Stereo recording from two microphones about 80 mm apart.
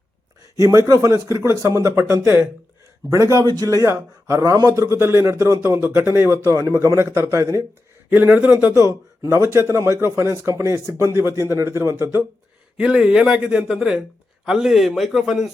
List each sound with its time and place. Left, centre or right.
0.5 s a man's voice: right
8.1 s a man's voice: right
8.7 s a man's voice: right
12.7 s a man's voice: centre